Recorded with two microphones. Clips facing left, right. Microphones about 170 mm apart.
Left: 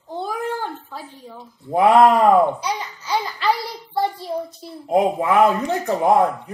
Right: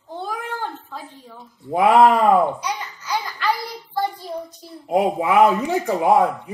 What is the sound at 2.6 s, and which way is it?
A child's voice, 30° left (ahead or behind).